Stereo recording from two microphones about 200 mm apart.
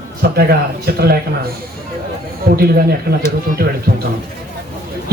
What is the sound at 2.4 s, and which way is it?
Speech, 50° right (ahead or behind).